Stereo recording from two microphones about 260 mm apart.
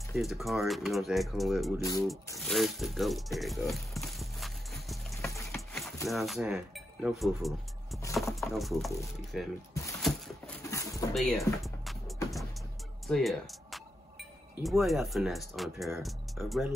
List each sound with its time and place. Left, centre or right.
0.1 s speech: centre
1.8 s speech: centre
2.0 s music: centre
6.0 s speech: centre
10.0 s a sound: centre
10.6 s pigeon: centre
11.1 s speech: centre
13.0 s music: centre
14.6 s speech: centre